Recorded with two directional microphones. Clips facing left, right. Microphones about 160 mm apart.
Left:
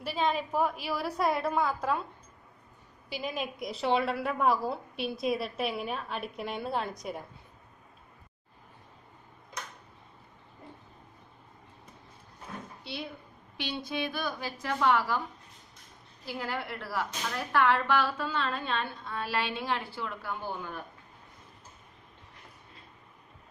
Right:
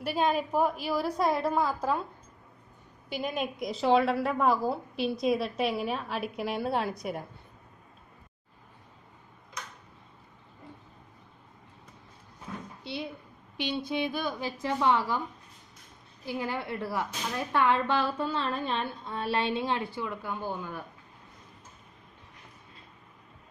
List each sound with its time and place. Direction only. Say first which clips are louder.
0.0 s a woman's voice: right 2 dB; 5° right (ahead or behind)
3.1 s a woman's voice: right 3 dB; centre (ahead or behind)
13.6 s speech: right 3 dB; 20° right (ahead or behind)
16.3 s speech: right 3 dB; 20° right (ahead or behind)